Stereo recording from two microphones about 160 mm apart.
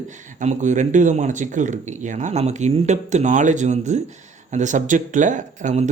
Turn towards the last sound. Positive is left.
turn(degrees=-45)  # may be behind; listen again after turning